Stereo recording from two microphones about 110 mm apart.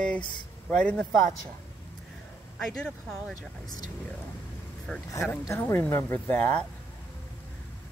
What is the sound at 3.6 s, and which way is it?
Speech, 35° left (ahead or behind).